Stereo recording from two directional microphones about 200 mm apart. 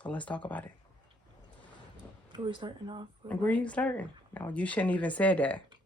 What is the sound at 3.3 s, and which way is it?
Speech, 5° left (ahead or behind).